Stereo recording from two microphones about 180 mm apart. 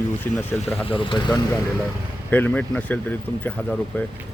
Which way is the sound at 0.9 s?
30° left (ahead or behind).